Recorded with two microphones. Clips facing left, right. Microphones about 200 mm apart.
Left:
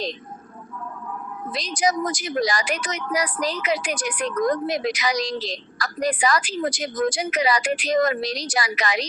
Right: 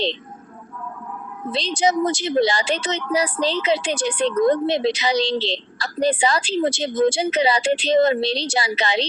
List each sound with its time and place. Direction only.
1.5 s a woman's voice: 25° right (ahead or behind)